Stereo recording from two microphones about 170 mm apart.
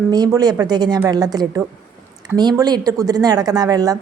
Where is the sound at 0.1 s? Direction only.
20° right (ahead or behind).